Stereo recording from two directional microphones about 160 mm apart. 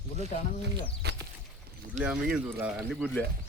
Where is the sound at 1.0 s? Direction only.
85° right.